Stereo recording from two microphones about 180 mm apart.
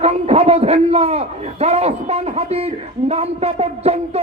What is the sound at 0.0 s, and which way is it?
A man's voice, 35° right (ahead or behind).